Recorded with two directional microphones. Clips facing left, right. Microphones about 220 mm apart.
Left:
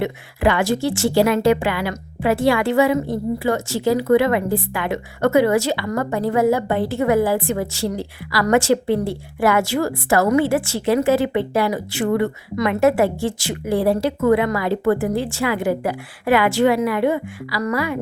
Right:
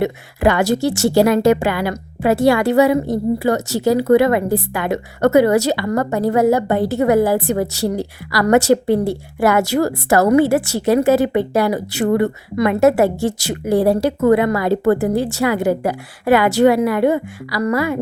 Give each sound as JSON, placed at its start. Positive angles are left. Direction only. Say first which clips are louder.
{"t": 0.0, "sound": "speech", "louder": "right 3 dB", "side_deg": -45}